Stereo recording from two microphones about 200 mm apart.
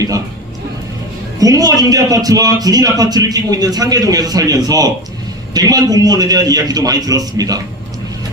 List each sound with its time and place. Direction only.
1.4 s a man's voice: 15° right (ahead or behind)